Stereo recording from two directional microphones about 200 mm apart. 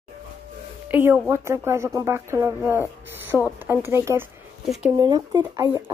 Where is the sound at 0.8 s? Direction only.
10° right (ahead or behind).